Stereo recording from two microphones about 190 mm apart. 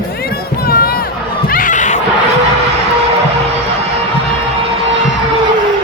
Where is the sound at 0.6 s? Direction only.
50° left (ahead or behind).